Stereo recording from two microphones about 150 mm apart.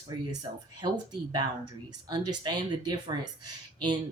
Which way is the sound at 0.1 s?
25° right (ahead or behind).